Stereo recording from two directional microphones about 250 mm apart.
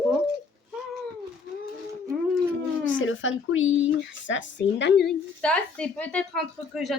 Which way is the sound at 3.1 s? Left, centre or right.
Left.